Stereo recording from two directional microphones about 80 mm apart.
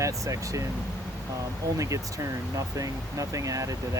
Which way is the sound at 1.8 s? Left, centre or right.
Right.